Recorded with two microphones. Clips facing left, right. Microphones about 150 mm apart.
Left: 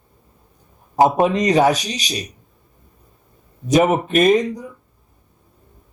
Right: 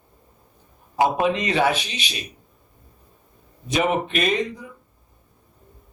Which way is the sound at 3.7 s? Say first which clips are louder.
Left 6 dB; 45° left (ahead or behind).